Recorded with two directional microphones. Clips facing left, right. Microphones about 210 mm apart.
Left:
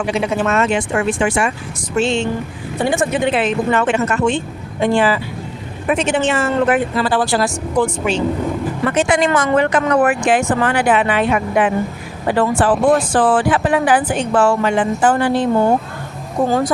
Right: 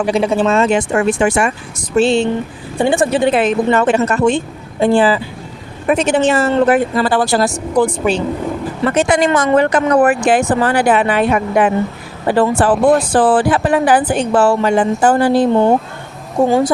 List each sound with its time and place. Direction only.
0.0 s speech: 35° right (ahead or behind)
0.7 s speech: 45° right (ahead or behind)
2.0 s speech: 35° right (ahead or behind)
16.5 s a woman's voice: 25° right (ahead or behind)